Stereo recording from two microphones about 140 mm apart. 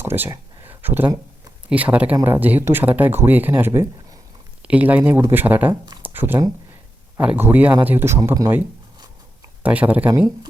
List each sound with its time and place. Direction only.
0.0 s speech: 15° right (ahead or behind)
6.0 s a sound: 15° right (ahead or behind)
7.2 s speech: 15° right (ahead or behind)
9.6 s speech: 10° right (ahead or behind)